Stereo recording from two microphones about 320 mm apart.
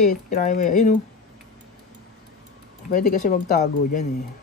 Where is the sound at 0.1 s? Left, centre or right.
Left.